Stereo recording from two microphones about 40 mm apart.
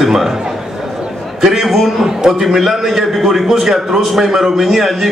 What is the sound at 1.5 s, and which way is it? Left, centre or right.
A man's voice, centre.